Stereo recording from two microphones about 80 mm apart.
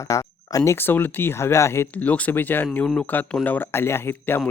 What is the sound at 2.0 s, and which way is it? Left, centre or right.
Speech, centre.